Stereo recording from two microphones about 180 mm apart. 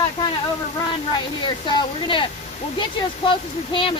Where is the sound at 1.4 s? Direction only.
25° left (ahead or behind).